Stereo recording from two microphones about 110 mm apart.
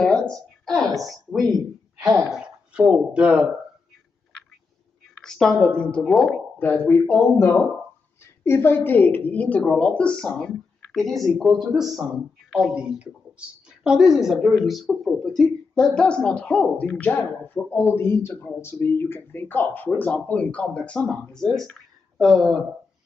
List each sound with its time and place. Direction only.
0.0 s a woman's voice: 5° left (ahead or behind)
5.2 s a woman's voice: 5° left (ahead or behind)
6.6 s speech: 15° left (ahead or behind)
7.2 s a woman's voice: centre (ahead or behind)
8.5 s a woman's voice: 20° left (ahead or behind); by 17.9 s 5° left (ahead or behind)
17.9 s a woman's voice: 20° left (ahead or behind); by 22.5 s centre (ahead or behind)